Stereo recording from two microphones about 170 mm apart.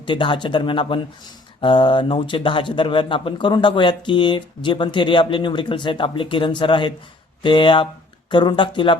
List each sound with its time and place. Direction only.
0.0 s speech: 30° left (ahead or behind)